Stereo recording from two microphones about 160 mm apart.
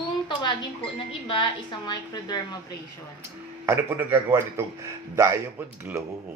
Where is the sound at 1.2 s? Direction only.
30° left (ahead or behind).